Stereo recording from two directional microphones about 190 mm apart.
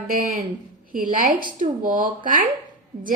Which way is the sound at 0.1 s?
45° right (ahead or behind).